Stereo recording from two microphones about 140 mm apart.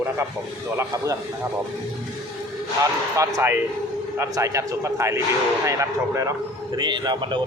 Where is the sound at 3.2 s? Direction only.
20° right (ahead or behind).